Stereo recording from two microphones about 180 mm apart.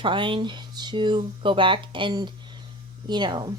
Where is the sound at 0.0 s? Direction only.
25° right (ahead or behind).